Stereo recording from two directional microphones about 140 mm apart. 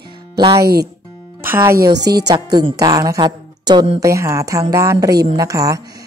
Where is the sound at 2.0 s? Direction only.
30° right (ahead or behind).